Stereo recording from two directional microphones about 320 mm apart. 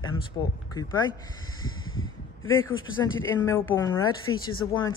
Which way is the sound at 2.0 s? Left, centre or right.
Left.